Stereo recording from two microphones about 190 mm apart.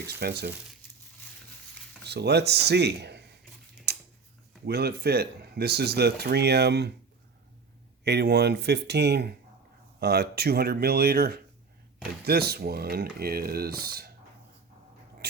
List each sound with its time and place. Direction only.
0.1 s speech: 55° right (ahead or behind)
2.0 s speech: 60° right (ahead or behind)
4.6 s speech: 60° right (ahead or behind)
8.0 s speech: 60° right (ahead or behind)
15.2 s a sound: 60° right (ahead or behind)